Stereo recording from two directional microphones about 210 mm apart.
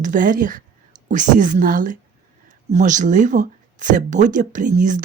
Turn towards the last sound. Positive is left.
turn(degrees=-35)  # may be behind; listen again after turning